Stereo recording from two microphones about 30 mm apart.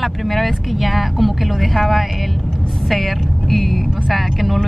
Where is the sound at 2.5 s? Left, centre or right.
Centre.